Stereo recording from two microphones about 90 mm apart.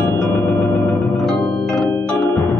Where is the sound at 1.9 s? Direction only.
20° left (ahead or behind).